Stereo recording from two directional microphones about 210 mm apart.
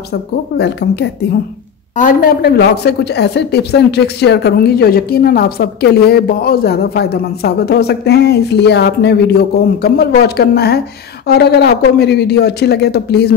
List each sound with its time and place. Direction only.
0.1 s a woman's voice: 55° left (ahead or behind)
2.0 s a woman's voice: 40° left (ahead or behind)